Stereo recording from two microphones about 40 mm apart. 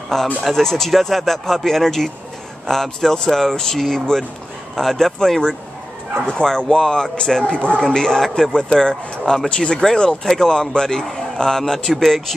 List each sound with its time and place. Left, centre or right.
0.1 s a man's voice: centre